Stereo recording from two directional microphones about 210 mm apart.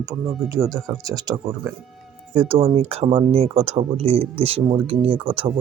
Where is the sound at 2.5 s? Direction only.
30° right (ahead or behind).